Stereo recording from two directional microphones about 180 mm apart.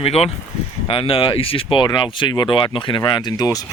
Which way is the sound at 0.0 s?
35° left (ahead or behind).